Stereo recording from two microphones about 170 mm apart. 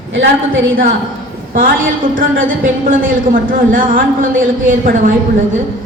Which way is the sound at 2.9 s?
55° right (ahead or behind).